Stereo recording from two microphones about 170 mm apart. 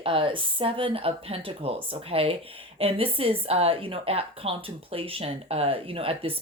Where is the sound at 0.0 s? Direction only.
30° right (ahead or behind).